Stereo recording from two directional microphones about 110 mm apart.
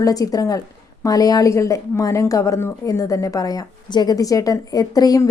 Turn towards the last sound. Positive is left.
turn(degrees=35)  # may be behind; listen again after turning